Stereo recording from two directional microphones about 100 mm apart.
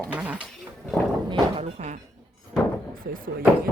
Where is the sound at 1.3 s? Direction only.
65° right (ahead or behind).